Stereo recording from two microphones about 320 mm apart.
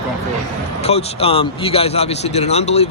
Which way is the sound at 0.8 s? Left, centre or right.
Centre.